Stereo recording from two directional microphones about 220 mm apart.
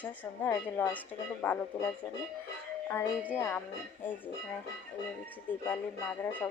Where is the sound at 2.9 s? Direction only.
10° left (ahead or behind).